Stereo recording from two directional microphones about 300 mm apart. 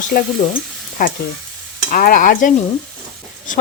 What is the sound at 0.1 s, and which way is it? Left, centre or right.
Stir, left.